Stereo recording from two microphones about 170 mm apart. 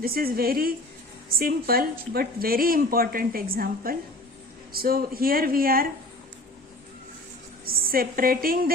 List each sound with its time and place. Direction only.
0.0 s a woman's voice: 60° right (ahead or behind)
7.6 s a woman's voice: 60° right (ahead or behind)